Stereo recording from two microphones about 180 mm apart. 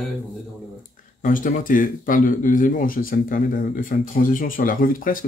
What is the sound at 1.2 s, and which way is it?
Speech, 50° left (ahead or behind).